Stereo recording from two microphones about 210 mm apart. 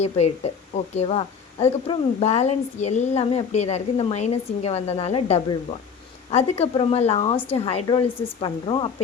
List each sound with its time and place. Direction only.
0.0 s a woman's voice: 30° left (ahead or behind)